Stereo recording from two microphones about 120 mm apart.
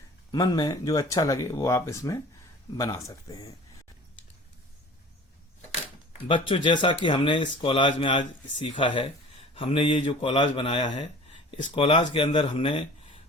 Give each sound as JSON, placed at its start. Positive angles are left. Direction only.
{"t": 0.3, "sound": "speech", "side_deg": 30}
{"t": 6.2, "sound": "speech", "side_deg": 45}